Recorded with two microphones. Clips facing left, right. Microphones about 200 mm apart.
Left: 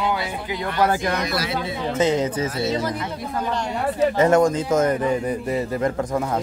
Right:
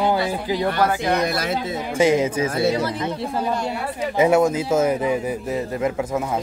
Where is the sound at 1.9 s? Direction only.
10° right (ahead or behind).